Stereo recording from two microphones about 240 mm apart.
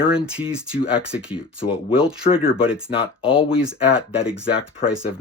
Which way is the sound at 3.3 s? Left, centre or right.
Left.